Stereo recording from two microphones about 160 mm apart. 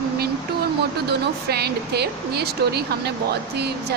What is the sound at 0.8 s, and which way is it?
Speech, 90° right.